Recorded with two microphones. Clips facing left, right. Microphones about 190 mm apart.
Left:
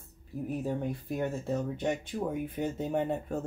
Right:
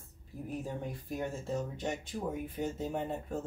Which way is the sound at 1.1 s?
60° left (ahead or behind).